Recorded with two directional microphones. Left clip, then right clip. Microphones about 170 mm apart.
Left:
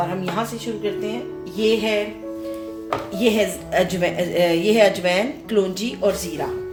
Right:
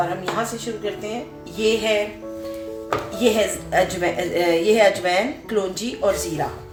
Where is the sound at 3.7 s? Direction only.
60° left (ahead or behind).